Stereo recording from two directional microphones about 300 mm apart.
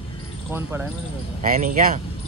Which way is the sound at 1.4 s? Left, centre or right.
Right.